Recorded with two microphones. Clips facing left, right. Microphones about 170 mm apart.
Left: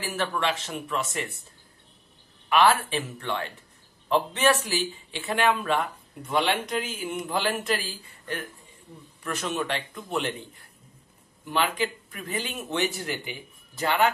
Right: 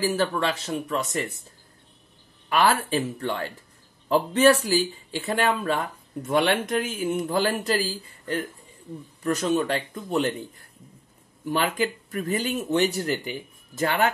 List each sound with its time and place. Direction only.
0.0 s speech: 35° right (ahead or behind)
2.5 s speech: 40° right (ahead or behind)
6.2 s speech: 50° right (ahead or behind)
11.4 s speech: 45° right (ahead or behind)